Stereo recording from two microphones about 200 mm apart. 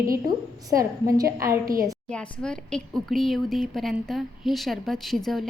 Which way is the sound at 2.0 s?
5° left (ahead or behind).